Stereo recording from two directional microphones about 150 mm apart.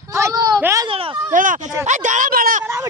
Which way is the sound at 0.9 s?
40° right (ahead or behind).